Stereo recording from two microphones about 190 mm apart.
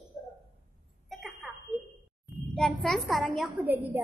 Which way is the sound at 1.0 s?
Centre (ahead or behind).